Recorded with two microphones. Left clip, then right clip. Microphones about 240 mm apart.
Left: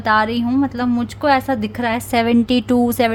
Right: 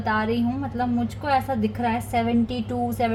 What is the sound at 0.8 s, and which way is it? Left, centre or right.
A woman's voice, left.